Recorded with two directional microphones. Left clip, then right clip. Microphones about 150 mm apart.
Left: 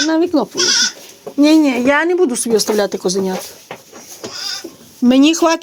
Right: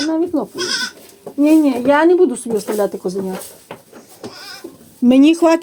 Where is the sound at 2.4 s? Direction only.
35° left (ahead or behind).